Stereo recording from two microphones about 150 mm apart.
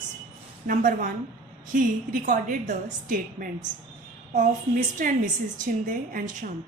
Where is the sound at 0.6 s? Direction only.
65° right (ahead or behind).